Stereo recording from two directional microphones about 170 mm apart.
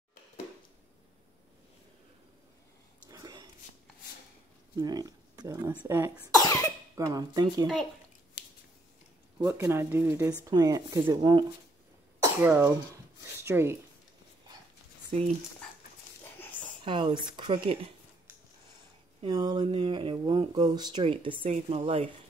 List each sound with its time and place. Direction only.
3.1 s whispering: 25° right (ahead or behind)
4.7 s speech: 20° right (ahead or behind)
5.7 s speech: 10° right (ahead or behind)
6.4 s cough: 20° left (ahead or behind)
7.1 s speech: 25° right (ahead or behind)
9.4 s speech: 20° right (ahead or behind)
16.3 s a sound: 10° left (ahead or behind)
16.8 s speech: 30° right (ahead or behind)
19.2 s speech: 25° right (ahead or behind)